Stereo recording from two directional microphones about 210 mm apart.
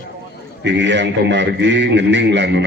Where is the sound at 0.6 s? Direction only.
55° right (ahead or behind).